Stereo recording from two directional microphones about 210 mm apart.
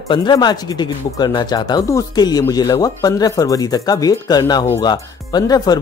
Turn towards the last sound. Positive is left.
turn(degrees=20)  # may be behind; listen again after turning